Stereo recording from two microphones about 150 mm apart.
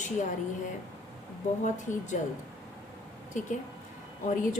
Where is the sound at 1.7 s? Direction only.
55° left (ahead or behind).